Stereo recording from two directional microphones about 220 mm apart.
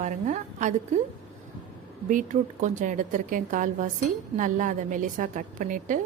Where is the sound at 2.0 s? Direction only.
35° right (ahead or behind).